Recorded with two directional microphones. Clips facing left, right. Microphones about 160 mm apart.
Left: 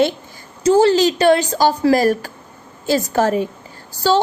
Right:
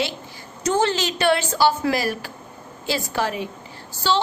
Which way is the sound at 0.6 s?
35° left (ahead or behind).